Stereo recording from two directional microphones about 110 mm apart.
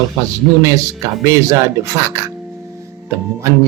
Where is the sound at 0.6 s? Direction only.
30° right (ahead or behind).